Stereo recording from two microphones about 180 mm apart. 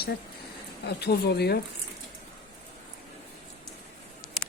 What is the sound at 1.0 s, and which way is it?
Speech, 65° left (ahead or behind).